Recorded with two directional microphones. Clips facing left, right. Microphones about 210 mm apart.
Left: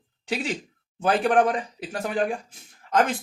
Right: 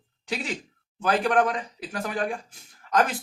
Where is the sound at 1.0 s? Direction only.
30° left (ahead or behind).